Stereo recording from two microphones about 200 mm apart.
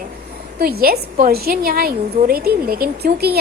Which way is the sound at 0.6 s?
50° right (ahead or behind).